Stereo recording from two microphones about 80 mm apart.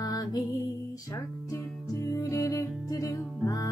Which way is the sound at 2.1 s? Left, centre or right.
Left.